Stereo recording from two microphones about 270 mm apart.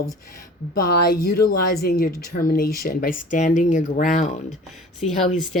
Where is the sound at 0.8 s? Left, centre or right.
Left.